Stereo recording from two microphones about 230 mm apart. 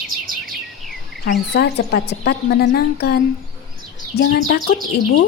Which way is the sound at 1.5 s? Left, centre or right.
Left.